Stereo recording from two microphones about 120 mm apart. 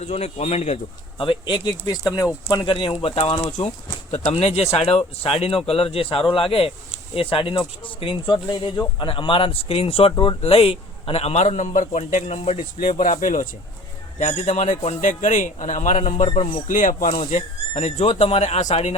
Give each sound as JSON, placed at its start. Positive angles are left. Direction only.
{"t": 0.0, "sound": "speech", "side_deg": 65}
{"t": 1.2, "sound": "speech", "side_deg": 45}
{"t": 2.5, "sound": "speech", "side_deg": 45}
{"t": 4.3, "sound": "speech", "side_deg": 65}
{"t": 14.2, "sound": "a man's voice", "side_deg": 70}